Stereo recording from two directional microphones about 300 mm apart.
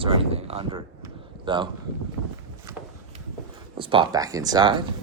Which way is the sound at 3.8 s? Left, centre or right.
Centre.